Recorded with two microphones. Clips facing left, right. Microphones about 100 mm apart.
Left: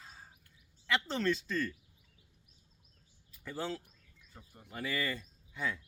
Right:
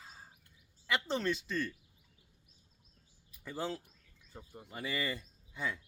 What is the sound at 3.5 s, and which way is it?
Speech, 15° right (ahead or behind).